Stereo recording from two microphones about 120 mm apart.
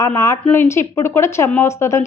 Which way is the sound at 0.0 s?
25° left (ahead or behind).